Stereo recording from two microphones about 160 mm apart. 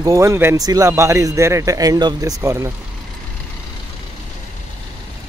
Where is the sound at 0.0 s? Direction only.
20° right (ahead or behind).